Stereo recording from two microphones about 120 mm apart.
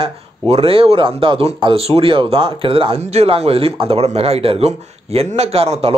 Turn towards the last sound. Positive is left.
turn(degrees=-55)  # may be behind; listen again after turning